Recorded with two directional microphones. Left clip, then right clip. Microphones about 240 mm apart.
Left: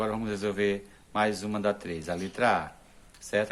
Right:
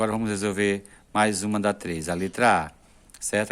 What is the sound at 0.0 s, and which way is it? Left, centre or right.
Speech, right.